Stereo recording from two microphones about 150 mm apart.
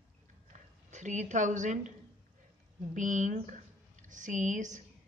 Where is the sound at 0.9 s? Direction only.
55° right (ahead or behind).